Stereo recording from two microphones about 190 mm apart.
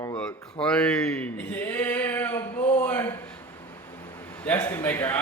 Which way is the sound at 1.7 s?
10° left (ahead or behind).